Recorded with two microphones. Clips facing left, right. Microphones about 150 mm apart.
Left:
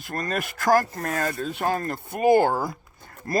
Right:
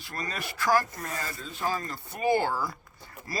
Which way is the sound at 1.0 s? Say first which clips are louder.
Left 9 dB; 70° left (ahead or behind).